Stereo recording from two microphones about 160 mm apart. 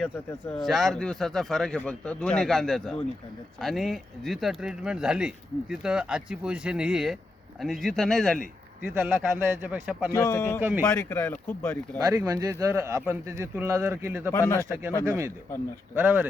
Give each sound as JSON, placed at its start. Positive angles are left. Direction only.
{"t": 0.6, "sound": "speech", "side_deg": 0}
{"t": 9.3, "sound": "speech", "side_deg": -10}
{"t": 10.2, "sound": "speech", "side_deg": 20}
{"t": 11.9, "sound": "speech", "side_deg": -20}
{"t": 14.3, "sound": "speech", "side_deg": 15}
{"t": 14.6, "sound": "speech", "side_deg": -15}